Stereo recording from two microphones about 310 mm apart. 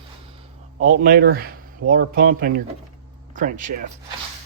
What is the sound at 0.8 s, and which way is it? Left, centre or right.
Speech, right.